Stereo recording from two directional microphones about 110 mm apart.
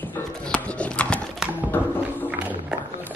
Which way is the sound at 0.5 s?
10° left (ahead or behind).